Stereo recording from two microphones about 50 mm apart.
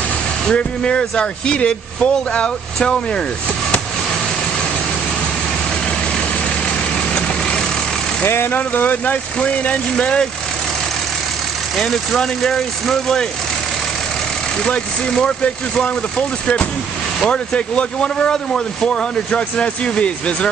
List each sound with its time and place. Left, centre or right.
0.5 s speech: centre
7.2 s vehicle: centre
8.3 s speech: left
8.5 s speech: left
11.7 s speech: centre
14.7 s speech: centre